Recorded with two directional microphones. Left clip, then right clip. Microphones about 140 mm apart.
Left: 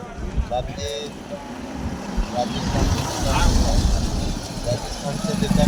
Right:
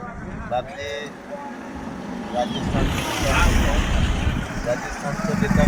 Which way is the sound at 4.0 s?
50° left (ahead or behind).